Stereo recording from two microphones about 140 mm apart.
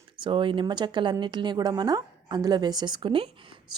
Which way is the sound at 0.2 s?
35° right (ahead or behind).